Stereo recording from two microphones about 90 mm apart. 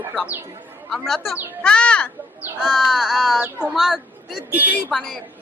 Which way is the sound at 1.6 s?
10° left (ahead or behind).